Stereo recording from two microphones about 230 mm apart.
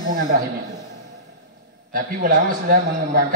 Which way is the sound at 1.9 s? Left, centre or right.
Right.